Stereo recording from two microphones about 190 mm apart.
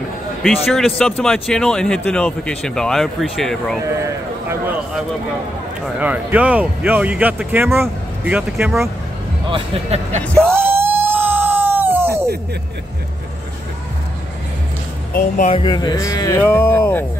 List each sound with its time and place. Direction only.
0.4 s speech: centre (ahead or behind)
9.5 s speech: 35° right (ahead or behind)
10.2 s speech: 5° left (ahead or behind)
10.5 s a sound: 10° right (ahead or behind)
15.1 s speech: 45° left (ahead or behind)
15.5 s speech: 25° left (ahead or behind)